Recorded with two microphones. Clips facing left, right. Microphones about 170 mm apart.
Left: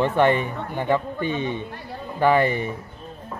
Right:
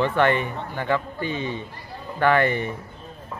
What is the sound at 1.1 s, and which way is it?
Speech, 55° left (ahead or behind).